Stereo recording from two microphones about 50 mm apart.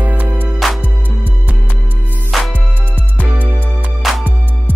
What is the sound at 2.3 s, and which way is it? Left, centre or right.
Music, centre.